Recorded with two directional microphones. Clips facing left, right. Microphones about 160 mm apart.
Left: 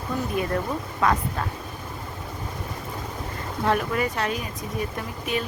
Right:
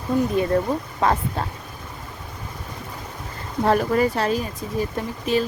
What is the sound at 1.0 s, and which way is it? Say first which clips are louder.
Speech: right 2 dB; 25° right (ahead or behind).